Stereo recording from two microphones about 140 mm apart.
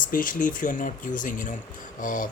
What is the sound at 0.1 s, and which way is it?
Speech, 75° left (ahead or behind).